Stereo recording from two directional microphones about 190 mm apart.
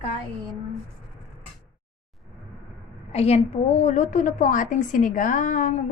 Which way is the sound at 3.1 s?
35° left (ahead or behind).